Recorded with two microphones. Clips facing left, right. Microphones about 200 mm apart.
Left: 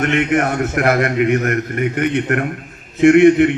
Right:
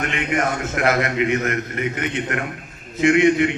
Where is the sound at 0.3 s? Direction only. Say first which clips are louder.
Left 5 dB; 60° left (ahead or behind).